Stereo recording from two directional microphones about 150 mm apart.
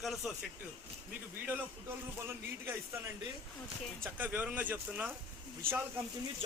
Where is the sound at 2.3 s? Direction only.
15° right (ahead or behind).